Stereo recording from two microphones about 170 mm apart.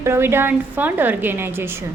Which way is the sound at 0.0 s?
15° right (ahead or behind).